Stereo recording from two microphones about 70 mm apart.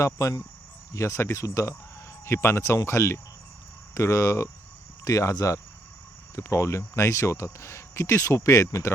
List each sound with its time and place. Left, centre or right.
0.0 s speech: left
2.2 s speech: left